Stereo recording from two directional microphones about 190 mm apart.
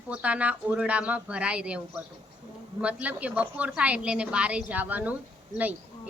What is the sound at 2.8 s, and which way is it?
A woman's voice, 5° right (ahead or behind).